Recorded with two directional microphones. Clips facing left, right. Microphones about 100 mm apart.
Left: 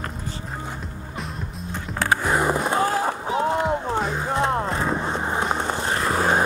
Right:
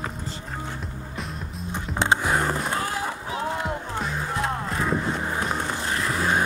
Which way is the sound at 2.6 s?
30° left (ahead or behind).